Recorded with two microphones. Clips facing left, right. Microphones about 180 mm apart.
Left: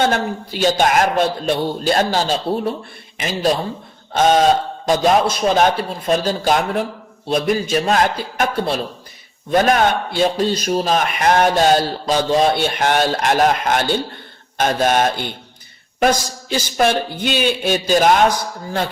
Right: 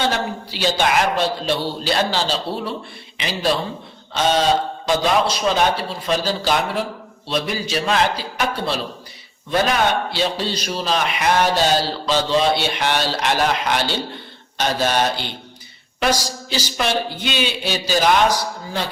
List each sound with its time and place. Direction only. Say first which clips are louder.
0.0 s a man's voice: left 4 dB; 50° left (ahead or behind)